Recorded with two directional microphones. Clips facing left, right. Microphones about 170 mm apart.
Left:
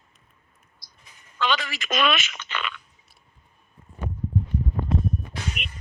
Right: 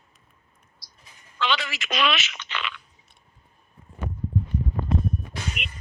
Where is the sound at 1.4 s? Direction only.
45° left (ahead or behind).